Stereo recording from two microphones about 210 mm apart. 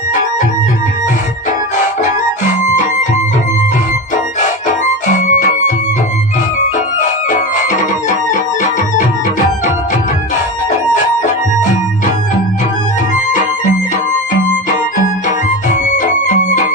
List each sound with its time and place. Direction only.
5.2 s music: 35° left (ahead or behind)
15.7 s music: 35° left (ahead or behind)